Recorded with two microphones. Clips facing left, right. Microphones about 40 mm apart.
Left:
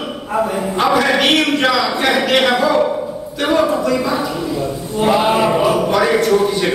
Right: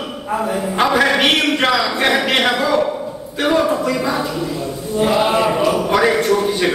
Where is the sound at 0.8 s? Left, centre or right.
Centre.